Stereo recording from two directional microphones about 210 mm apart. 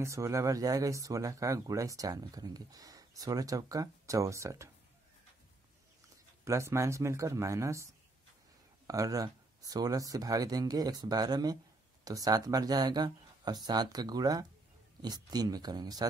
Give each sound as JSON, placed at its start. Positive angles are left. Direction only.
{"t": 0.0, "sound": "speech", "side_deg": -15}
{"t": 6.4, "sound": "speech", "side_deg": -15}